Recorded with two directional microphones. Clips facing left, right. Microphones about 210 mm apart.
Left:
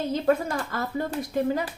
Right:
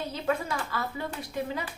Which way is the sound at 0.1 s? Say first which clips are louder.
Left 7 dB; 45° left (ahead or behind).